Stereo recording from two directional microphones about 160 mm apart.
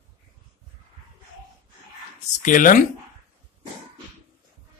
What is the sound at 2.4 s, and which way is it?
Speech, 55° left (ahead or behind).